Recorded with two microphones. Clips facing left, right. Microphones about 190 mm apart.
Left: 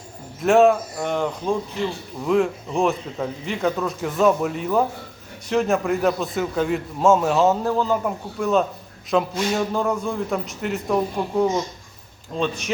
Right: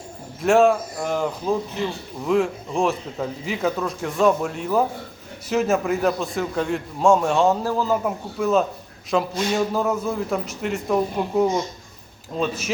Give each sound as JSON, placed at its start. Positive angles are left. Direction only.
{"t": 0.4, "sound": "a man's voice", "side_deg": 0}